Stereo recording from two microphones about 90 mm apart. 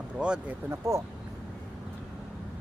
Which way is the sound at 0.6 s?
30° right (ahead or behind).